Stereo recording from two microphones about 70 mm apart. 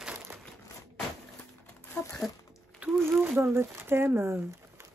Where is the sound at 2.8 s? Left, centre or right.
Right.